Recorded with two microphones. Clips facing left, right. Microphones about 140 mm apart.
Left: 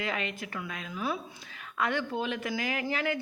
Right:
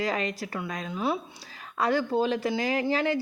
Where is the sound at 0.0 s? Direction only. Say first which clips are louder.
Right 5 dB; 35° right (ahead or behind).